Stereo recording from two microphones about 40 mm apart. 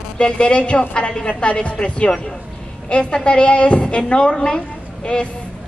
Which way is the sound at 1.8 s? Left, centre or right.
Centre.